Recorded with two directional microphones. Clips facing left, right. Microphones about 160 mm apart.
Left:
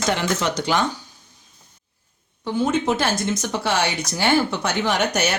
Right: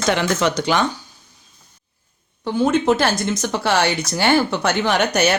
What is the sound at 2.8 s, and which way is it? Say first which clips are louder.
Speech: right 4 dB; 75° right (ahead or behind).